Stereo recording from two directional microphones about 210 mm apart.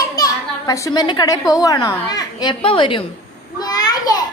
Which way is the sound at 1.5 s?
15° left (ahead or behind).